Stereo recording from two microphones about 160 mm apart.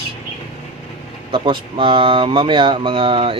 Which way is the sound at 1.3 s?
30° right (ahead or behind).